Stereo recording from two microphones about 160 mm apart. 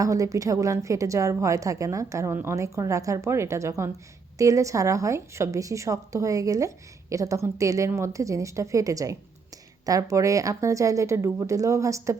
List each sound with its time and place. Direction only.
0.0 s a woman's voice: 20° right (ahead or behind)